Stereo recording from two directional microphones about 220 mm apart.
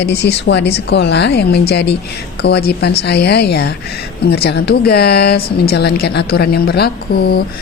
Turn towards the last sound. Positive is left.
turn(degrees=45)  # may be behind; listen again after turning